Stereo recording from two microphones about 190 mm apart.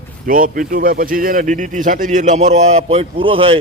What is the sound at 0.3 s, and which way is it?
Speech, 45° right (ahead or behind).